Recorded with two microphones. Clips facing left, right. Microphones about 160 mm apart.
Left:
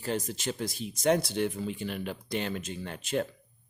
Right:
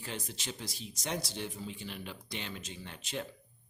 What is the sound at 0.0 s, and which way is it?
Speech, 45° left (ahead or behind).